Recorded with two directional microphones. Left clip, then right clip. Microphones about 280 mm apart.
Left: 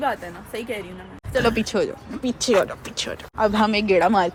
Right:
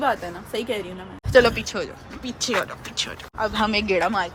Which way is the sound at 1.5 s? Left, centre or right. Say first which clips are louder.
Left 5 dB; centre.